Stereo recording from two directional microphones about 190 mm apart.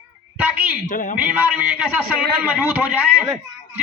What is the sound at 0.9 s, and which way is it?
Speech, 45° left (ahead or behind).